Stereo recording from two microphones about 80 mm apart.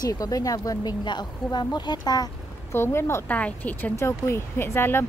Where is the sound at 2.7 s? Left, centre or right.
Left.